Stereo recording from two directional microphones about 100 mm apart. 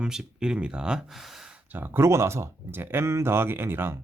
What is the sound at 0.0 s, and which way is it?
Speech, 5° right (ahead or behind).